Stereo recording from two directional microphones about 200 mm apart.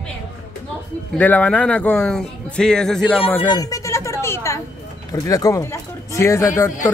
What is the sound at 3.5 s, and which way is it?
Speech, 15° left (ahead or behind).